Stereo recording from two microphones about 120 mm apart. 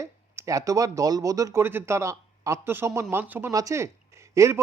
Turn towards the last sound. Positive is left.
turn(degrees=-25)  # may be behind; listen again after turning